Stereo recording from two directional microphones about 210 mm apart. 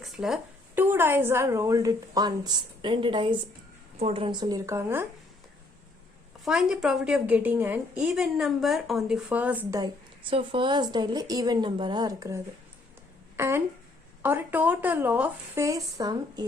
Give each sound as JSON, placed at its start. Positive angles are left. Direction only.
{"t": 0.0, "sound": "a sound", "side_deg": 0}
{"t": 0.8, "sound": "a woman's voice", "side_deg": -10}
{"t": 6.4, "sound": "a woman's voice", "side_deg": 0}
{"t": 9.8, "sound": "a woman's voice", "side_deg": -25}